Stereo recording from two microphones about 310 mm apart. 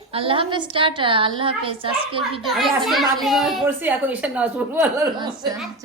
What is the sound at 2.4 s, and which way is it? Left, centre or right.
A woman's voice, centre.